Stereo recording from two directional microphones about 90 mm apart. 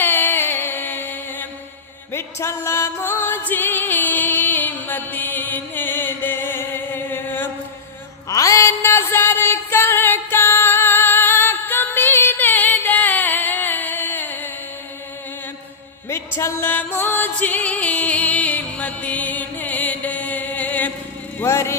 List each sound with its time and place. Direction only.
0.0 s music: 20° left (ahead or behind)
8.3 s music: 35° left (ahead or behind)
16.0 s music: 30° left (ahead or behind)
21.3 s a sound: 30° left (ahead or behind)